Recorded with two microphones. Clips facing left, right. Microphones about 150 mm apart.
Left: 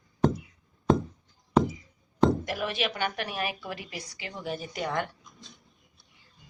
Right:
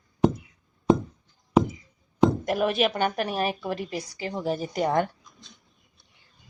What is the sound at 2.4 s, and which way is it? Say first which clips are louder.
A woman's voice: right 7 dB; 45° right (ahead or behind).